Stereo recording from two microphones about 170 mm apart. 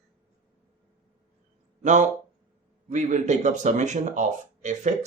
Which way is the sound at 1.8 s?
45° right (ahead or behind).